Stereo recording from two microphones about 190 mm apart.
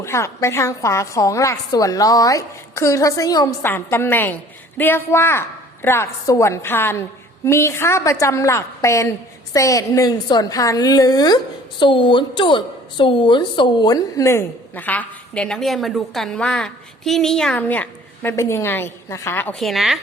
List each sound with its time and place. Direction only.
0.0 s a woman's voice: 15° left (ahead or behind); by 20.0 s centre (ahead or behind)